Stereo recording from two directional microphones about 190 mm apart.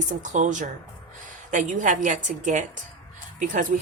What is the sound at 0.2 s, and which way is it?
A woman's voice, 40° right (ahead or behind).